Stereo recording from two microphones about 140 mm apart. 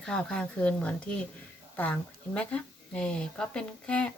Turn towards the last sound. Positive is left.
turn(degrees=5)  # may be behind; listen again after turning